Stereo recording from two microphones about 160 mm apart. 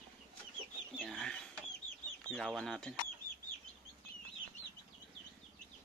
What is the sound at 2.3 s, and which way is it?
Speech, centre (ahead or behind).